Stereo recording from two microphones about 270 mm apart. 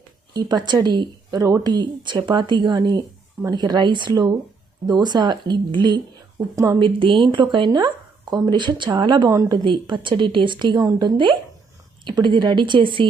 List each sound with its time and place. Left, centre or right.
0.3 s speech: centre